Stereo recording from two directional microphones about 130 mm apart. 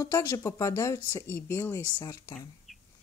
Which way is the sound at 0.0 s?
25° left (ahead or behind).